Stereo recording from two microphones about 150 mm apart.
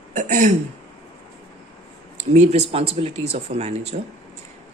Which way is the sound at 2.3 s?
45° right (ahead or behind).